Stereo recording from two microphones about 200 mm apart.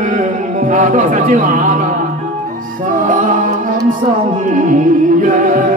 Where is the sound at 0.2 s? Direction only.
40° right (ahead or behind).